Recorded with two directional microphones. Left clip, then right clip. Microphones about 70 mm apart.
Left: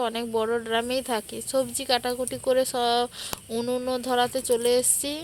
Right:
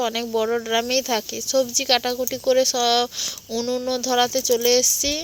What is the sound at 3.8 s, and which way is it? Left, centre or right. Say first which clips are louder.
Speech: right 5 dB; right.